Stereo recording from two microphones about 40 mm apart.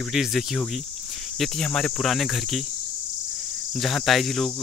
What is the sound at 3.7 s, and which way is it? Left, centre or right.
Speech, centre.